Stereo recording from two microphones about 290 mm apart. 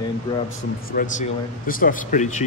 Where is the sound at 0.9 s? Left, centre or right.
Left.